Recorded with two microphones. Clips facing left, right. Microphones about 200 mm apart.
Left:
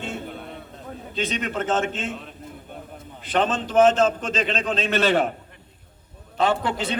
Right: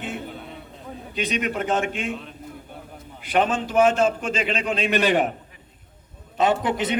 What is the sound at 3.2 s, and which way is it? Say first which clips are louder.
A man's voice: right 1 dB; 10° right (ahead or behind).